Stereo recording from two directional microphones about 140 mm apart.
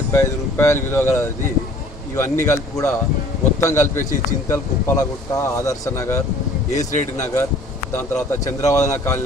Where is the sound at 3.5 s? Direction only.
20° left (ahead or behind).